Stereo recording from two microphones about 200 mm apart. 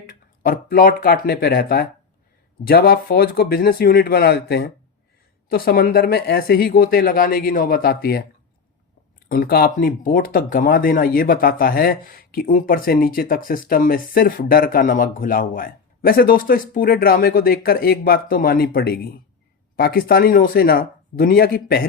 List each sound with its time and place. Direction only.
0.1 s speech: 45° left (ahead or behind)
9.3 s speech: 50° left (ahead or behind)